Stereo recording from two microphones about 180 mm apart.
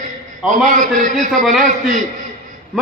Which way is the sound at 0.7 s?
45° right (ahead or behind).